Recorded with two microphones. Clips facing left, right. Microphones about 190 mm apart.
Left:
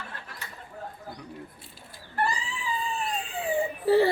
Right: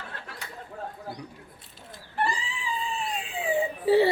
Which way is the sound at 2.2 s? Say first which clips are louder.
Even; centre (ahead or behind).